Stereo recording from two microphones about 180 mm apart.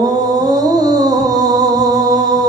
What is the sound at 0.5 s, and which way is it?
Music, 20° right (ahead or behind).